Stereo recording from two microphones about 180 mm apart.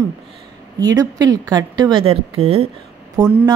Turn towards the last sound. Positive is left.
turn(degrees=-20)  # may be behind; listen again after turning